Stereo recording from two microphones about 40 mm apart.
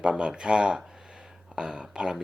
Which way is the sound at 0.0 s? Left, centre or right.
Right.